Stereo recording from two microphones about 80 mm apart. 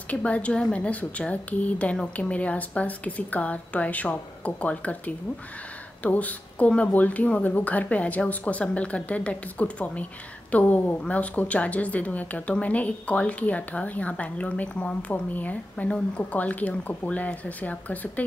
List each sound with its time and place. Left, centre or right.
0.1 s a woman's voice: centre